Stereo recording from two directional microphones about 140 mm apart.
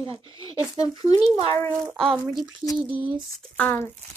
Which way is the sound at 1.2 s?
30° left (ahead or behind).